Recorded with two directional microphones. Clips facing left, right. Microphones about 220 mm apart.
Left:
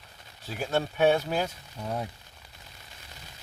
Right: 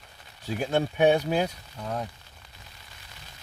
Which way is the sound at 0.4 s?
15° right (ahead or behind).